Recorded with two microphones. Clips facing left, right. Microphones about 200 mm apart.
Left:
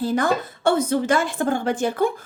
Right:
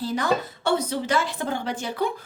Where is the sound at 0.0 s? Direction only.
50° left (ahead or behind).